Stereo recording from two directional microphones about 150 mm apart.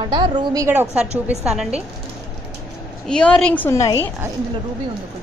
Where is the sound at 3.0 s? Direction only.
5° left (ahead or behind).